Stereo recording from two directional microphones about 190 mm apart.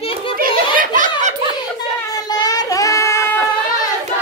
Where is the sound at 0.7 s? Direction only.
45° right (ahead or behind).